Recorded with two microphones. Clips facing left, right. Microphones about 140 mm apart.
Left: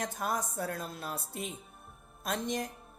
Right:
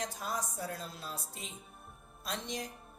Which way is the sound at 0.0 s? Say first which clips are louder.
Left 4 dB; 55° left (ahead or behind).